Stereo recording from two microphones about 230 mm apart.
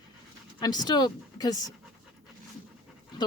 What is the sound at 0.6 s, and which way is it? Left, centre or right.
Speech, centre.